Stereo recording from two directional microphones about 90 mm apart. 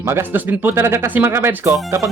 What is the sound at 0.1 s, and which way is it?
Speech, 25° right (ahead or behind).